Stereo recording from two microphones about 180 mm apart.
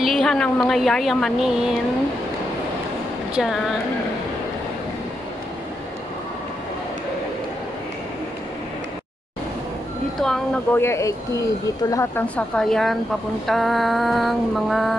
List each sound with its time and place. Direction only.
0.0 s a woman's voice: centre (ahead or behind)
3.3 s a woman's voice: centre (ahead or behind)
10.1 s a woman's voice: centre (ahead or behind)
10.8 s a woman's voice: 15° left (ahead or behind); by 15.0 s centre (ahead or behind)